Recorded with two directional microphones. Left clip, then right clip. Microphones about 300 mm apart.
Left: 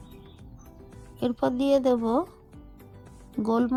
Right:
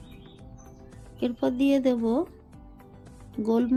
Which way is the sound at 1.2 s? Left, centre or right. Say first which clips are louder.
Even; left.